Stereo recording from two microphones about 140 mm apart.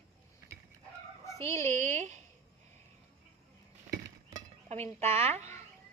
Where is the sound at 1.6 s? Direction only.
55° right (ahead or behind).